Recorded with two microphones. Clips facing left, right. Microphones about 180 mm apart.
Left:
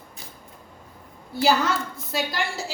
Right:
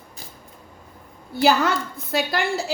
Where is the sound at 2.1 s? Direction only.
60° right (ahead or behind).